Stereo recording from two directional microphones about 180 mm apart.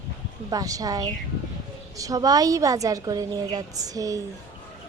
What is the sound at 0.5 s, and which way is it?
A woman's voice, 20° right (ahead or behind).